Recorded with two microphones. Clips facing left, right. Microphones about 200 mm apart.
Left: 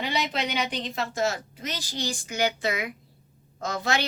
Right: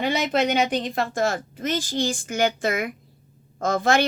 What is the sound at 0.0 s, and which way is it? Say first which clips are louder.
A woman's voice: right 7 dB; 50° right (ahead or behind).